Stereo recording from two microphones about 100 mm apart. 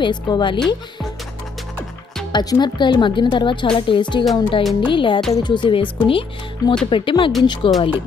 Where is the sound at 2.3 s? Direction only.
45° left (ahead or behind); by 7.8 s 65° left (ahead or behind).